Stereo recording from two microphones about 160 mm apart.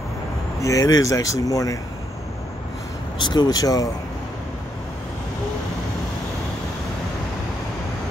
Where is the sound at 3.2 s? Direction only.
25° left (ahead or behind).